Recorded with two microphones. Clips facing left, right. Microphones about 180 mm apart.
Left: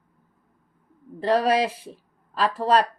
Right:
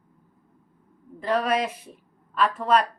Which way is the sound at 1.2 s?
30° left (ahead or behind).